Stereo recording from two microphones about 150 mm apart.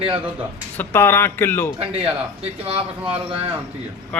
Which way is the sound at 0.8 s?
15° left (ahead or behind).